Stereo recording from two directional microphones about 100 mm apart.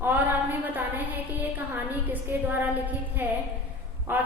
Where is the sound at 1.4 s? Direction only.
20° right (ahead or behind).